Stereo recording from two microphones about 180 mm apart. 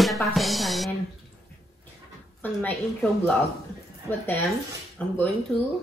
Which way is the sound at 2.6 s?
5° left (ahead or behind).